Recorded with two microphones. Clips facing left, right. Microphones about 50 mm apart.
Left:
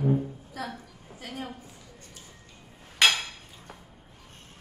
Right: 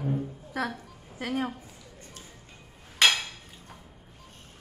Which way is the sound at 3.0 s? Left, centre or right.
Centre.